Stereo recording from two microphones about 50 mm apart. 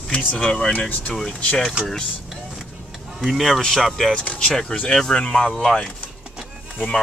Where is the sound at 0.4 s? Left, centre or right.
Centre.